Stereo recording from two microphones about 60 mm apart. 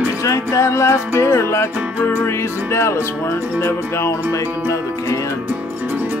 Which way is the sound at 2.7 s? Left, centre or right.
Left.